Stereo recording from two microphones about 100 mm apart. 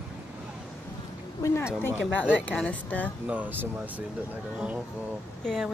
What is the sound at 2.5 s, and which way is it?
Speech, 15° left (ahead or behind).